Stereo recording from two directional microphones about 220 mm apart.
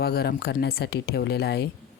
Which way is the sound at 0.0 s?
45° left (ahead or behind).